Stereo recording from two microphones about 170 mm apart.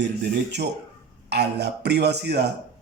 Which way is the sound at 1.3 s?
80° right.